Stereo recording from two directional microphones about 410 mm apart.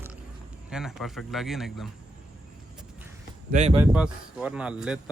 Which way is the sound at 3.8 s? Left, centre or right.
Centre.